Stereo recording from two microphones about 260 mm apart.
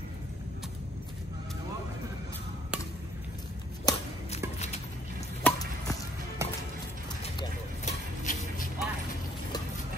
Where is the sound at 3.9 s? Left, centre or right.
Centre.